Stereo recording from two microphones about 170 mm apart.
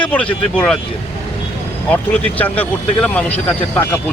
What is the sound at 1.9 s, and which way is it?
Speech, 10° left (ahead or behind).